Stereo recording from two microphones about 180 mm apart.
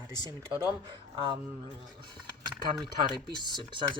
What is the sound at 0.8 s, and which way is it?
Speech, 25° right (ahead or behind).